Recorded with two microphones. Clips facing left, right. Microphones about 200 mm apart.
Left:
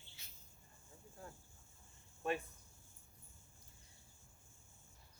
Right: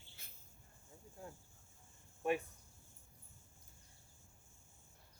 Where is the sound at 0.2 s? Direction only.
55° right (ahead or behind).